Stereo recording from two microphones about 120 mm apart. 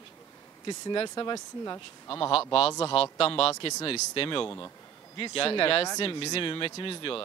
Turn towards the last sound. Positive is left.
turn(degrees=45)  # may be behind; listen again after turning